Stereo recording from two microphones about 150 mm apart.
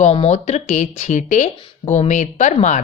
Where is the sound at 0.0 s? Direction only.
45° left (ahead or behind).